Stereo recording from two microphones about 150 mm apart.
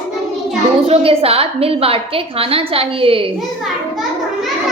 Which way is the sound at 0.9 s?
40° right (ahead or behind).